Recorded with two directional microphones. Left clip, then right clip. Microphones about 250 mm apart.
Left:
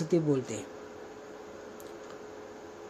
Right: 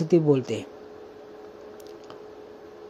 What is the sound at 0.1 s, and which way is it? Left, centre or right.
Speech, right.